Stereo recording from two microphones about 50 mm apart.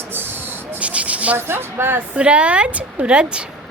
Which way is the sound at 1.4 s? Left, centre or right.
Right.